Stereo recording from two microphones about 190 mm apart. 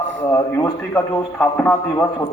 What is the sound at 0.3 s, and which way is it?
A man's voice, 15° left (ahead or behind).